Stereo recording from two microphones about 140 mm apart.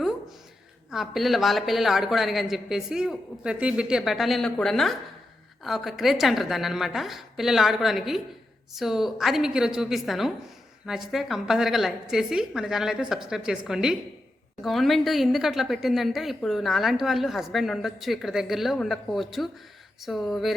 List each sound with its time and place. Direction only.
0.9 s a woman's voice: centre (ahead or behind)